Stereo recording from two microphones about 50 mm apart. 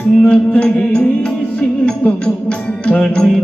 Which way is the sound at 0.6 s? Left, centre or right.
Centre.